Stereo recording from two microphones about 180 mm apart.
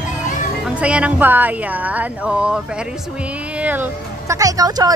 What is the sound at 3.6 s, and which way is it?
Speech, 10° right (ahead or behind).